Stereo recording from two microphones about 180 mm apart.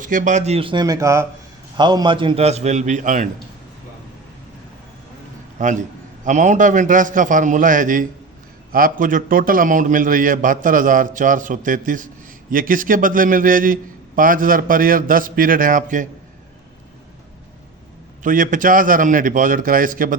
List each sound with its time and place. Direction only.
0.0 s a man's voice: 50° right (ahead or behind)
5.6 s a man's voice: 45° right (ahead or behind)
18.2 s a man's voice: 45° right (ahead or behind)